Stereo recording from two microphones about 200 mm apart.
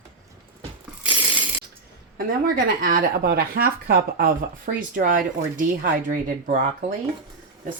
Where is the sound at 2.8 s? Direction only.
50° right (ahead or behind).